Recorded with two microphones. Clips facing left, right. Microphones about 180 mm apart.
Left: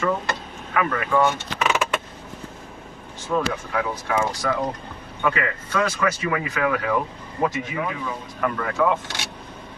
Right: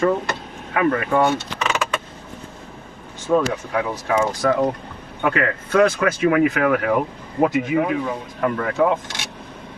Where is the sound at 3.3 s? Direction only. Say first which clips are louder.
Right 5 dB; 50° right (ahead or behind).